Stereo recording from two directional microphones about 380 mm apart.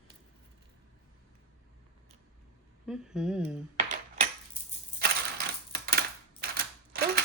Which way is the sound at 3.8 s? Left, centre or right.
Centre.